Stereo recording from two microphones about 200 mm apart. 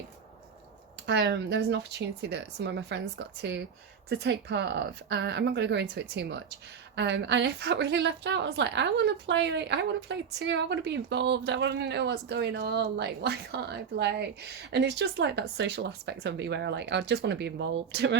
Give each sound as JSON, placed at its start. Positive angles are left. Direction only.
{"t": 1.2, "sound": "a woman's voice", "side_deg": -55}